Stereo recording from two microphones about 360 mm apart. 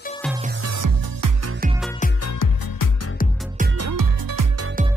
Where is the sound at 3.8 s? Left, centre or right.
Right.